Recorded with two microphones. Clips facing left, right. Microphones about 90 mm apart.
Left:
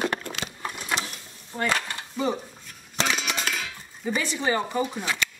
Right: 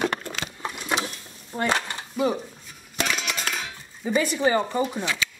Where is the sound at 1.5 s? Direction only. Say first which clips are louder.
Right 2 dB; 20° right (ahead or behind).